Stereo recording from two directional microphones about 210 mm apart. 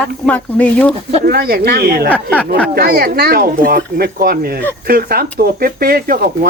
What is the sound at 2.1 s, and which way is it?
Speech, 5° left (ahead or behind).